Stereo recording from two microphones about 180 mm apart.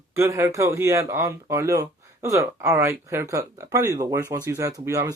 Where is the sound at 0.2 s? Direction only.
15° right (ahead or behind).